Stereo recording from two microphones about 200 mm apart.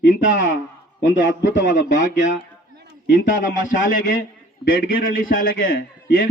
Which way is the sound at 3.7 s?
40° left (ahead or behind).